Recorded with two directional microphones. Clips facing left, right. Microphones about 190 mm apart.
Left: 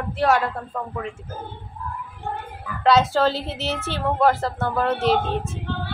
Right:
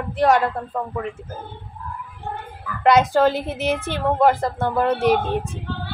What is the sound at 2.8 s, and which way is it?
Speech, 15° right (ahead or behind).